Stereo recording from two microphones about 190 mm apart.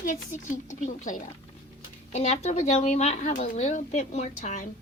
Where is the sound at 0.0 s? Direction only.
45° left (ahead or behind).